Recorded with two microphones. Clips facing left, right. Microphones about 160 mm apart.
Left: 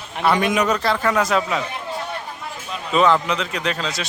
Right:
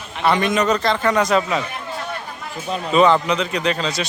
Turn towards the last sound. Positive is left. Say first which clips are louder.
# right 3 dB
turn(degrees=0)  # may be behind; listen again after turning